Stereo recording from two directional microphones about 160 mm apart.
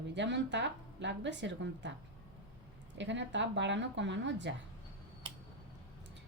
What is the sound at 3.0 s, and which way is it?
A woman's voice, 90° right.